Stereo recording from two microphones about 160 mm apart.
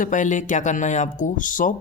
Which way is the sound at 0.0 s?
55° left (ahead or behind).